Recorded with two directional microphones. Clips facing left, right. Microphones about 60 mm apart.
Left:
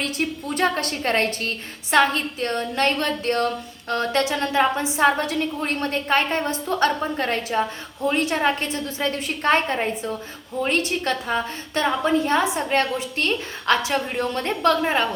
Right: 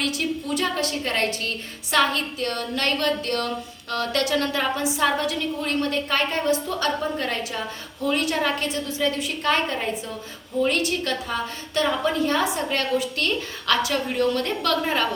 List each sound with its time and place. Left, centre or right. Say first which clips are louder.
0.0 s a woman's voice: even; left